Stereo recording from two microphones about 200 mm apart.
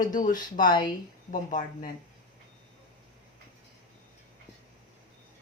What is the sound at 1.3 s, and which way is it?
Speech, 40° left (ahead or behind).